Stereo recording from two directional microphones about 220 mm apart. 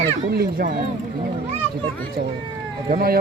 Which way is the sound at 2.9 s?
45° right (ahead or behind).